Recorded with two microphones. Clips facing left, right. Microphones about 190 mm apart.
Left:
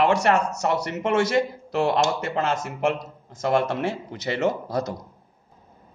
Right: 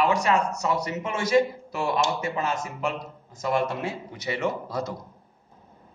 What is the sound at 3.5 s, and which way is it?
Speech, 90° left.